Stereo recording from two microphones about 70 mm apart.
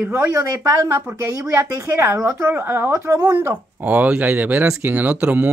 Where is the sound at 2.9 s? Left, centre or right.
Right.